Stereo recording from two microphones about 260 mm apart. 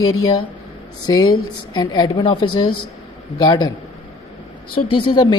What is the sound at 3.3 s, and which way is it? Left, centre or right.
Speech, centre.